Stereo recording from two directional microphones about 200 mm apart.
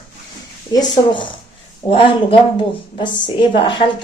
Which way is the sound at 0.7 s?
20° left (ahead or behind).